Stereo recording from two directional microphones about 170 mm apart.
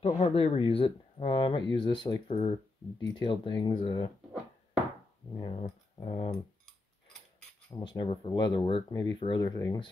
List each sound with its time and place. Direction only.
0.0 s speech: 35° left (ahead or behind)
5.4 s speech: 30° left (ahead or behind)
7.8 s speech: 30° left (ahead or behind)